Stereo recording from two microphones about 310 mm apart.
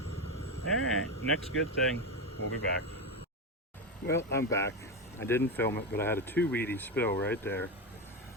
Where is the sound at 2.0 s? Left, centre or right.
Left.